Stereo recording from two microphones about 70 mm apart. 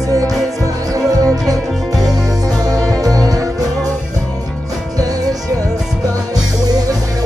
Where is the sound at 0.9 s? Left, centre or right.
Right.